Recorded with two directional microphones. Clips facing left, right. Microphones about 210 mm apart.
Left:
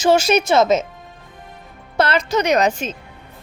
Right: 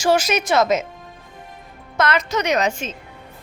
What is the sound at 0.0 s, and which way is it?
Speech, 25° left (ahead or behind).